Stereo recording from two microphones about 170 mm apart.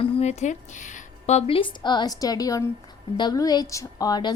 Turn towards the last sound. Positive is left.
turn(degrees=25)  # may be behind; listen again after turning